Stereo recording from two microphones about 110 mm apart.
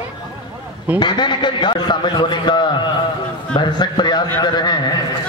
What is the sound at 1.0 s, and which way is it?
A man's voice, 45° left (ahead or behind).